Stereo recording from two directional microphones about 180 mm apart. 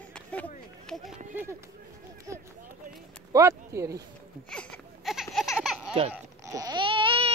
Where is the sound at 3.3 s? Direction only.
15° right (ahead or behind).